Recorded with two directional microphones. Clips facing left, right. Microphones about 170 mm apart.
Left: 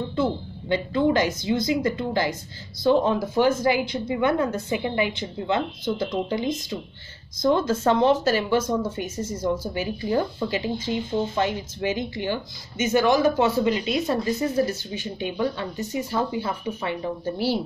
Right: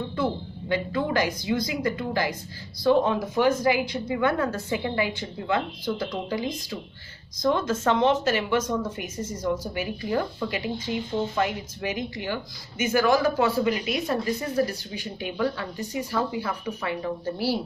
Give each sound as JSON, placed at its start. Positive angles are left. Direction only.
{"t": 0.1, "sound": "a woman's voice", "side_deg": 25}